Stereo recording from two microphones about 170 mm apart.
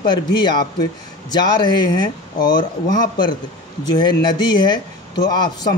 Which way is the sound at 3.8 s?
25° left (ahead or behind).